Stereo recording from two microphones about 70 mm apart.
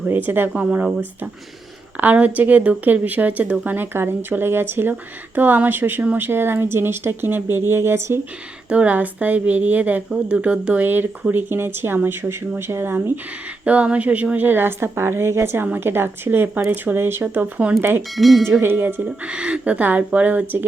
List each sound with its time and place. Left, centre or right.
0.1 s a woman's voice: right
0.5 s a woman's voice: right
3.9 s a woman's voice: right
8.7 s a woman's voice: centre; by 13.1 s right
13.7 s a woman's voice: centre; by 18.0 s right
18.2 s speech: centre
18.6 s a woman's voice: right
19.0 s a woman's voice: centre